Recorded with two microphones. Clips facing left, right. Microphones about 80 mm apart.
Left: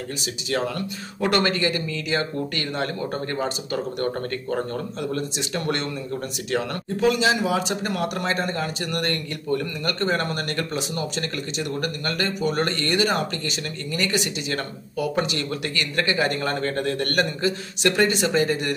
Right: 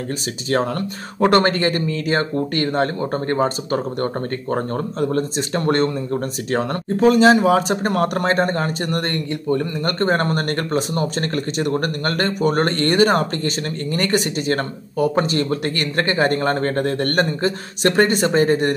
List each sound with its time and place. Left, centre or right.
0.5 s speech: right
9.0 s speech: right
9.9 s speech: right